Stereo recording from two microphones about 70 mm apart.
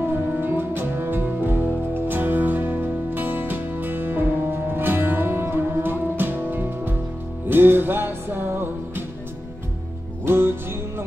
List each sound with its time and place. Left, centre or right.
0.1 s music: right
10.2 s music: right